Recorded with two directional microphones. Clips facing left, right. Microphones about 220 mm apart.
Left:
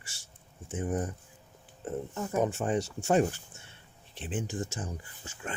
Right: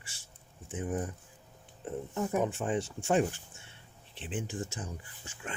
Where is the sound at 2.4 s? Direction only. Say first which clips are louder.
Left 2 dB; 45° left (ahead or behind).